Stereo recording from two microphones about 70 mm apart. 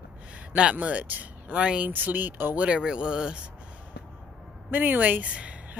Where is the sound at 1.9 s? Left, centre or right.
Right.